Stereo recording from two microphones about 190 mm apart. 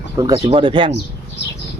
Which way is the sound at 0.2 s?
25° right (ahead or behind).